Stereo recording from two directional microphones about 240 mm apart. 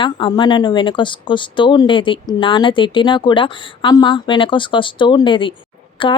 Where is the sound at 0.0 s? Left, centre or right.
Centre.